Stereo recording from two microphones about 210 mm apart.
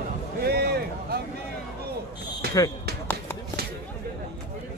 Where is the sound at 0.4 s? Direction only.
50° right (ahead or behind).